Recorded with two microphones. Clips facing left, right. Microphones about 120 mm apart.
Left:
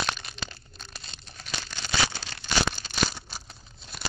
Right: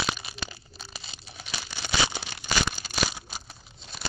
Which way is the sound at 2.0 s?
15° right (ahead or behind).